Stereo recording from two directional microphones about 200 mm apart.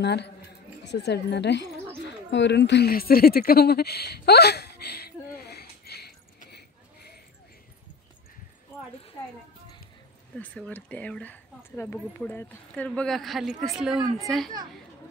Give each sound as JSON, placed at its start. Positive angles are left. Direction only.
{"t": 0.0, "sound": "speech", "side_deg": 55}
{"t": 2.3, "sound": "a sound", "side_deg": 60}
{"t": 10.3, "sound": "a woman's voice", "side_deg": 5}